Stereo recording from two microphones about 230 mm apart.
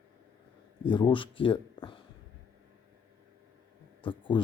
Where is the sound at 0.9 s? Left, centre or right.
Left.